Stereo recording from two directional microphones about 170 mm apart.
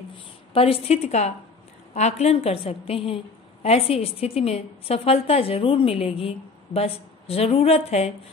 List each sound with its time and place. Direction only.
0.5 s a woman's voice: 35° left (ahead or behind)